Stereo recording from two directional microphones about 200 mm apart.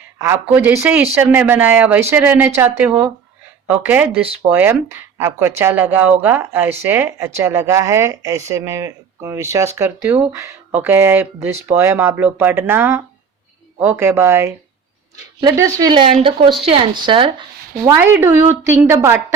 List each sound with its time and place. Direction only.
0.2 s speech: 10° right (ahead or behind)
3.7 s speech: 10° right (ahead or behind)
17.8 s speech: 10° right (ahead or behind)